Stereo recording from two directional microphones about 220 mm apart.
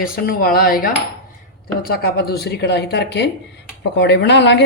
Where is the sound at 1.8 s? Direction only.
45° left (ahead or behind).